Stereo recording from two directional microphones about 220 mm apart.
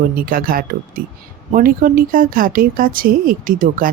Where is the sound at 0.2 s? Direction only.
40° right (ahead or behind).